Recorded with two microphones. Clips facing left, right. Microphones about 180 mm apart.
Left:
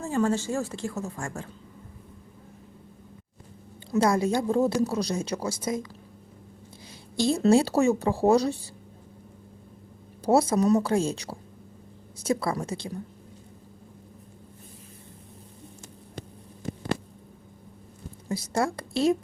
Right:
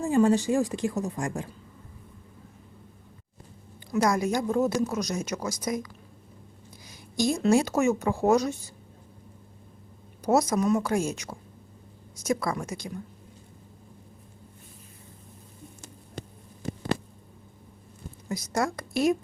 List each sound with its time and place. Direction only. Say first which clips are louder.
0.0 s a woman's voice: right 4 dB; 15° right (ahead or behind)
3.9 s a woman's voice: left 2 dB; 30° left (ahead or behind)
7.2 s a woman's voice: left 2 dB; 30° left (ahead or behind)
10.2 s a woman's voice: left 2 dB; 30° left (ahead or behind)
18.3 s a woman's voice: left 1 dB; 30° left (ahead or behind)